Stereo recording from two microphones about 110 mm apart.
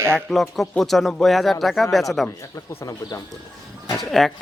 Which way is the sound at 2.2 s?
25° left (ahead or behind).